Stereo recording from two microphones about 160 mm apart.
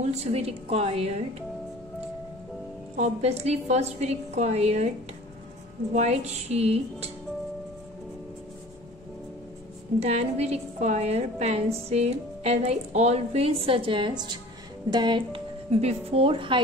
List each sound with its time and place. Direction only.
0.1 s a woman's voice: 40° right (ahead or behind)
3.0 s a woman's voice: 45° right (ahead or behind)
5.9 s a woman's voice: 40° right (ahead or behind)
9.9 s a woman's voice: 40° right (ahead or behind)